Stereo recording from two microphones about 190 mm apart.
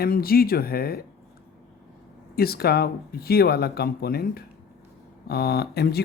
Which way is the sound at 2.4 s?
55° left (ahead or behind).